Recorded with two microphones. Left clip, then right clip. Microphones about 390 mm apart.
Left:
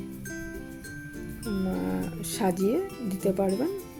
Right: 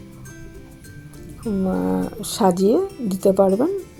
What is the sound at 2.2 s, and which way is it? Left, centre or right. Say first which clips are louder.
Speech: right 9 dB; left.